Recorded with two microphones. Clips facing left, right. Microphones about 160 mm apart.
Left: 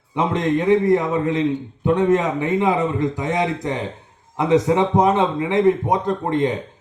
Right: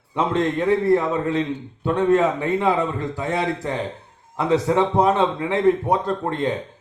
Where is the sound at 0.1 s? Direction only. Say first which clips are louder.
Left 1 dB; 15° left (ahead or behind).